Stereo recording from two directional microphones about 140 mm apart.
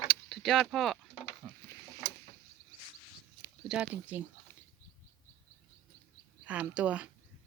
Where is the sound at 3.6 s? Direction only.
5° right (ahead or behind).